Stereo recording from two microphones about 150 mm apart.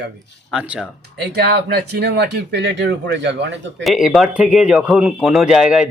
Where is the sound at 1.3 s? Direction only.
90° right.